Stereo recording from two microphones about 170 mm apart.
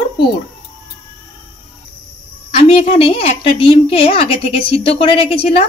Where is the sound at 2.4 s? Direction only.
35° left (ahead or behind).